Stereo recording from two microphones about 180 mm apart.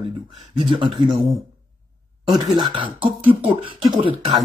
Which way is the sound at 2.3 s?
25° right (ahead or behind).